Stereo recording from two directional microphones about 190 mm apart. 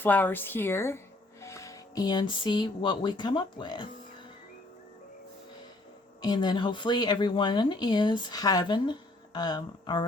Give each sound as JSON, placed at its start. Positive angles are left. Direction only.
{"t": 0.0, "sound": "speech", "side_deg": 10}
{"t": 6.2, "sound": "speech", "side_deg": 20}